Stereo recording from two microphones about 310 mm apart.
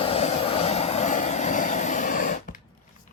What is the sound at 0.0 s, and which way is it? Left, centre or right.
Vehicle, centre.